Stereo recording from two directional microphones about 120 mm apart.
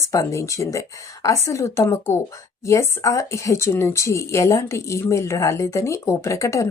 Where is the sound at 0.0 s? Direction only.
25° left (ahead or behind).